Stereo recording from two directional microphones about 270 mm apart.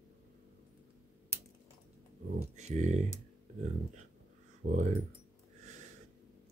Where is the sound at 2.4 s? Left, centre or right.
Right.